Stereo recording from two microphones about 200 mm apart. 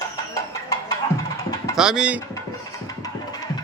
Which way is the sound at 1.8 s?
5° right (ahead or behind).